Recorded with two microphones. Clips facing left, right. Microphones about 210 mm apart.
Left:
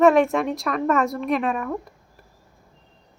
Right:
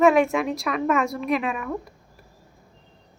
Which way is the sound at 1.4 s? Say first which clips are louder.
Left 3 dB; 40° left (ahead or behind).